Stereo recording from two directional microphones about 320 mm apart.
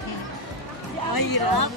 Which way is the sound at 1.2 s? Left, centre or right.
Left.